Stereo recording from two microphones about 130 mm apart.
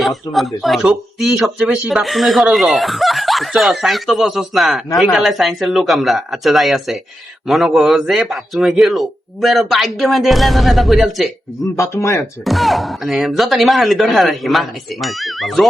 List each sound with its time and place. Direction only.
0.0 s speech: centre (ahead or behind)
11.8 s speech: 25° left (ahead or behind)
12.5 s speech: centre (ahead or behind)